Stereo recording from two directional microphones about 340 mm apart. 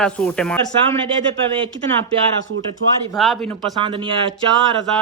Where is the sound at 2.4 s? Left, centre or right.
Right.